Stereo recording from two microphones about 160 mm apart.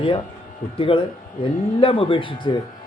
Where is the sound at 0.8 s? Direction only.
35° left (ahead or behind).